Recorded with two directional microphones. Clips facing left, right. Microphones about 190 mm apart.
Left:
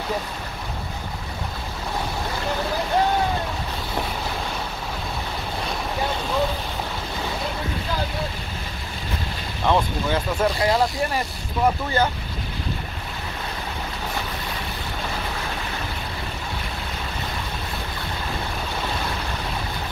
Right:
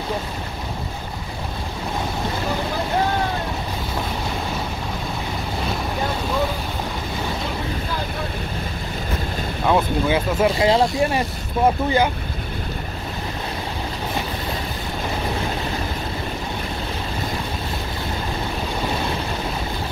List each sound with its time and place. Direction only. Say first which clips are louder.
9.7 s vehicle: right 3 dB; 10° right (ahead or behind)
10.6 s speech: right 4 dB; 20° right (ahead or behind)